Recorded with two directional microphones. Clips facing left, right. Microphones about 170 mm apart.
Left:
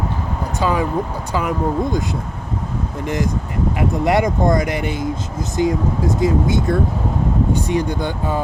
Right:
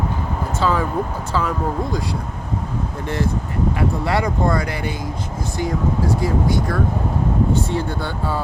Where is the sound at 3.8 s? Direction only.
20° left (ahead or behind).